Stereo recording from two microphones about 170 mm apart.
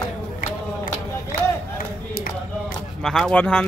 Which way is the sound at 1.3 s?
55° left (ahead or behind).